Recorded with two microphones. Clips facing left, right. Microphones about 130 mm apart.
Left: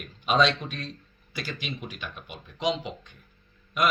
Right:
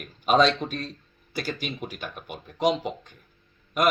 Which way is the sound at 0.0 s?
45° right (ahead or behind).